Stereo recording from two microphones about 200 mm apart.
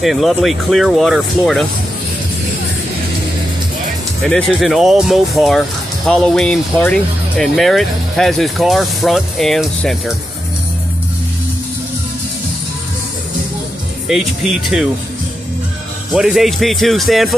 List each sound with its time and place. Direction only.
0.0 s speech: centre (ahead or behind)
4.2 s speech: centre (ahead or behind)
14.0 s speech: centre (ahead or behind)
16.1 s speech: centre (ahead or behind)